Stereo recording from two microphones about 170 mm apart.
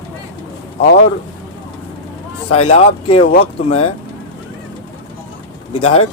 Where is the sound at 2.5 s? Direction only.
35° left (ahead or behind).